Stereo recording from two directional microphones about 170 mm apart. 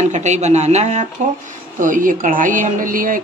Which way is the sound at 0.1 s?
45° right (ahead or behind).